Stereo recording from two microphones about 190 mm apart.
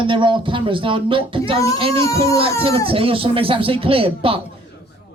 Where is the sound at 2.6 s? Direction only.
30° right (ahead or behind).